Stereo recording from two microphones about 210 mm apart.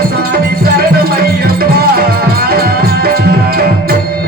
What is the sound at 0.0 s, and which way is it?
Music, 45° right (ahead or behind).